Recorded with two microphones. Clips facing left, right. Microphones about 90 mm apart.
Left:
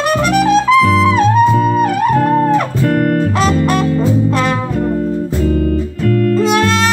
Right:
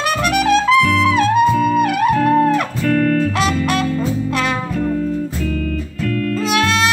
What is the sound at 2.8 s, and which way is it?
Music, 45° left (ahead or behind).